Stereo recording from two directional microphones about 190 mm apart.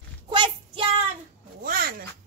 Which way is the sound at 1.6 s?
50° right (ahead or behind).